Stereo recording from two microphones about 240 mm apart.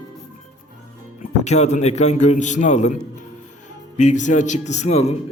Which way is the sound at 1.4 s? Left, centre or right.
Left.